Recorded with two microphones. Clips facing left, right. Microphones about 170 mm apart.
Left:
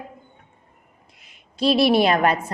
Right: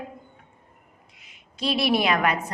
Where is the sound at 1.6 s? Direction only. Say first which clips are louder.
Left 6 dB; 35° left (ahead or behind).